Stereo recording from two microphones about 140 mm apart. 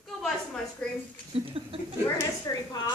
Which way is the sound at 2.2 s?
30° left (ahead or behind).